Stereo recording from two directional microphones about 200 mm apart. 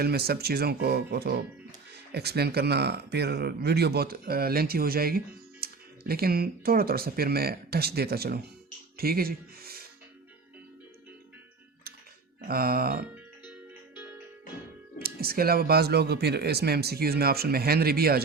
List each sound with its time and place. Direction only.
0.0 s speech: 50° right (ahead or behind)
12.5 s speech: 50° right (ahead or behind)
13.5 s music: 10° right (ahead or behind)
15.0 s speech: 50° right (ahead or behind)